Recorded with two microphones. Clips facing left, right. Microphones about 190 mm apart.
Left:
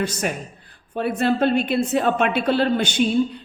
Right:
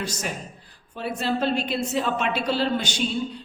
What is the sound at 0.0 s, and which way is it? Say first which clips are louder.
A woman's voice: left 6 dB; 60° left (ahead or behind).